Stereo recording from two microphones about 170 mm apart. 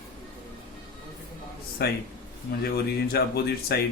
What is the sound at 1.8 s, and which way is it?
Speech, 70° left (ahead or behind).